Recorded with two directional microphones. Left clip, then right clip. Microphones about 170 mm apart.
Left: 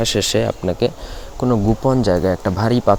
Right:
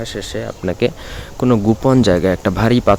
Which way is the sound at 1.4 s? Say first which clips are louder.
Right 3 dB; 25° right (ahead or behind).